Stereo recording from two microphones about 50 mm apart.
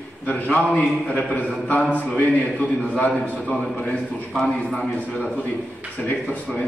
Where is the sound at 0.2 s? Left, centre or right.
Left.